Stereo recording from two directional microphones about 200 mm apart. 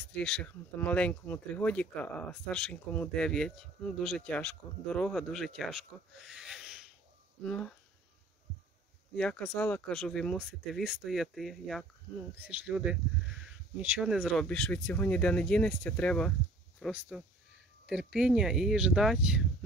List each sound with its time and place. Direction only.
0.0 s speech: 5° left (ahead or behind)
9.1 s speech: 5° left (ahead or behind)